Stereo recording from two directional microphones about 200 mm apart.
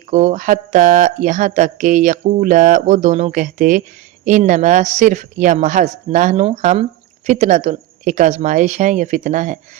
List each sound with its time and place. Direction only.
0.1 s speech: 35° right (ahead or behind)